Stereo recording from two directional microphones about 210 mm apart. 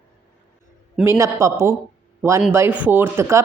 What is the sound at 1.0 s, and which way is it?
Speech, 15° right (ahead or behind).